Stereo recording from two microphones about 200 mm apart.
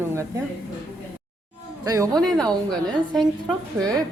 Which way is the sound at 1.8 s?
15° right (ahead or behind).